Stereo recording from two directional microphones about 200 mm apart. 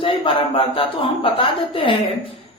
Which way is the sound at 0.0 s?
25° left (ahead or behind).